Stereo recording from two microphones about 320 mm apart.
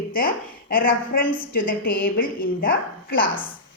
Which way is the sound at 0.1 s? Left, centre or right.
Left.